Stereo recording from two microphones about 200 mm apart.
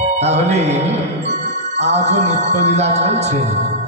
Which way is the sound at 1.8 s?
35° right (ahead or behind).